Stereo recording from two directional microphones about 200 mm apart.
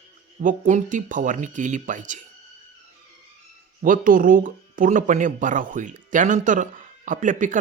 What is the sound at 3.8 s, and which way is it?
A man's voice, 40° right (ahead or behind).